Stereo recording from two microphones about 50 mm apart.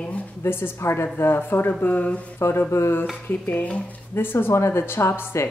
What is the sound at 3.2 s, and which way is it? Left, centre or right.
Speech, left.